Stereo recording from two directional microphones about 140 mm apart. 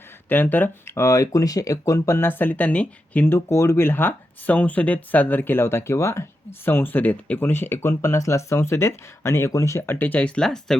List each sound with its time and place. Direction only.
0.3 s speech: 15° left (ahead or behind)